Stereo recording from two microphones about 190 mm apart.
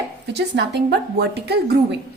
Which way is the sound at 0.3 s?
65° right (ahead or behind).